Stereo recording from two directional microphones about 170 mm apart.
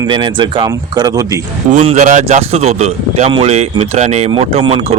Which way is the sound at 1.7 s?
40° right (ahead or behind).